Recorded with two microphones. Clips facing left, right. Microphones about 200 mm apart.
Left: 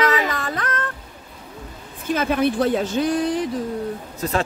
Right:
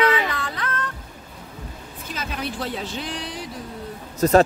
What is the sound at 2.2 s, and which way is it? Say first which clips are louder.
Speech: left 10 dB; 55° left (ahead or behind).